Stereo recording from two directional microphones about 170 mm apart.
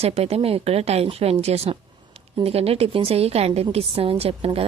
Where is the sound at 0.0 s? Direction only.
35° right (ahead or behind).